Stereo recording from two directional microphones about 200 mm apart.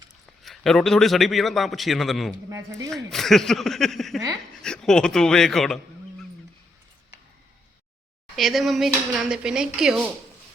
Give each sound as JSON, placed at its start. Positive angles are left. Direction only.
{"t": 0.4, "sound": "a man's voice", "side_deg": 0}
{"t": 2.5, "sound": "speech", "side_deg": -15}
{"t": 2.9, "sound": "a man's voice", "side_deg": 0}
{"t": 8.4, "sound": "a man's voice", "side_deg": 0}